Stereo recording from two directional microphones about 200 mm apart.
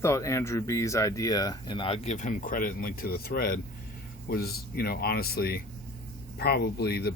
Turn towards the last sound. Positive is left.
turn(degrees=55)  # may be behind; listen again after turning